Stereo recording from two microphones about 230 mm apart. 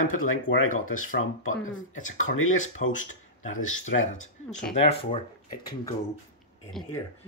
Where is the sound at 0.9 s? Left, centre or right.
Left.